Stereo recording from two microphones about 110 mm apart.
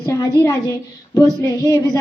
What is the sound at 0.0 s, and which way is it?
A woman's voice, 30° left (ahead or behind).